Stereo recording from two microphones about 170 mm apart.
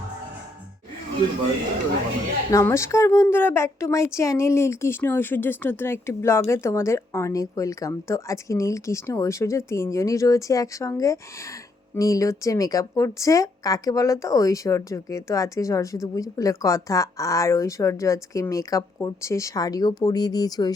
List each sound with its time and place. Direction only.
2.5 s speech: 15° left (ahead or behind)